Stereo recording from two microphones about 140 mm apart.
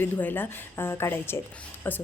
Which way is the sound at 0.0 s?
15° left (ahead or behind).